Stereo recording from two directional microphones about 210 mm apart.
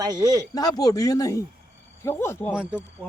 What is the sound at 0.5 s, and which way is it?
Speech, 20° left (ahead or behind).